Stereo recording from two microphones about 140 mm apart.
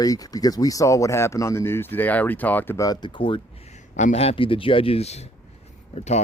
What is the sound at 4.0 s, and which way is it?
Speech, 55° left (ahead or behind).